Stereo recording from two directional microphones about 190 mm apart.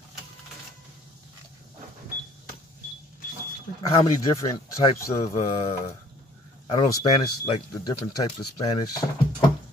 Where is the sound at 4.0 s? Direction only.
30° left (ahead or behind).